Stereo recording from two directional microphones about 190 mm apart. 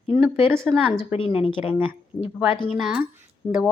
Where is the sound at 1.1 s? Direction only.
30° left (ahead or behind).